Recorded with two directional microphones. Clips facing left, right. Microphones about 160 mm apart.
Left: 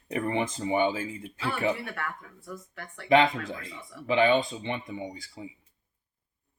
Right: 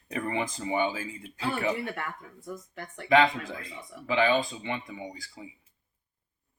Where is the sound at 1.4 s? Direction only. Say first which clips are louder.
Even; 20° right (ahead or behind).